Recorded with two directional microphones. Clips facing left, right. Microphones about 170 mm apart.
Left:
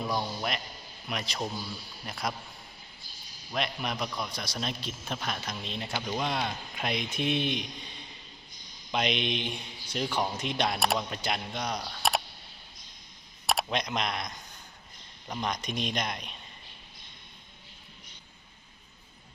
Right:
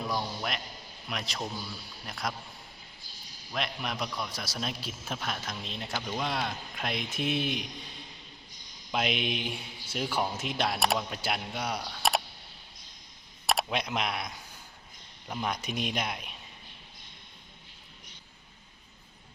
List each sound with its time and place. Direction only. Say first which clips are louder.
0.0 s a man's voice: left 1 dB; centre (ahead or behind)
3.5 s a man's voice: left 2 dB; centre (ahead or behind)
13.5 s a man's voice: even; centre (ahead or behind)